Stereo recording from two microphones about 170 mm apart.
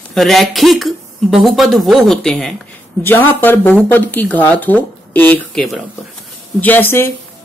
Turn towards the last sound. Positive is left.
turn(degrees=15)  # may be behind; listen again after turning